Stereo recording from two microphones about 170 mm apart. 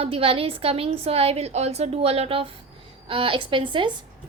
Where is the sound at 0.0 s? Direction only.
35° right (ahead or behind).